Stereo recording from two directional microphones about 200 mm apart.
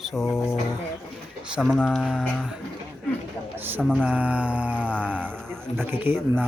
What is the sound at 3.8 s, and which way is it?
Speech, 5° right (ahead or behind).